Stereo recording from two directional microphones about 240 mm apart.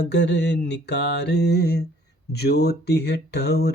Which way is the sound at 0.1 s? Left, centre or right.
Left.